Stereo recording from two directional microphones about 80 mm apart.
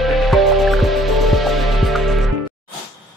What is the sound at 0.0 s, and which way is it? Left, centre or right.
Music, centre.